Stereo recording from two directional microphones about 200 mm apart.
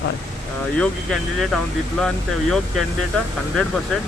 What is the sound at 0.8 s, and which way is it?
Speech, centre (ahead or behind).